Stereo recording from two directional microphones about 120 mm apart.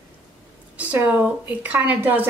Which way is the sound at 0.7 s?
10° right (ahead or behind).